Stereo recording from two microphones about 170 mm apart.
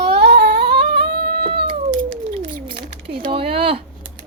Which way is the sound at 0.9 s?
30° right (ahead or behind).